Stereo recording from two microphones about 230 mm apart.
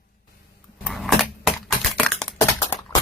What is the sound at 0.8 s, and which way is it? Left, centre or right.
Typing, centre.